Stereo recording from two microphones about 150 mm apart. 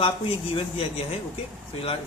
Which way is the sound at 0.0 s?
40° left (ahead or behind).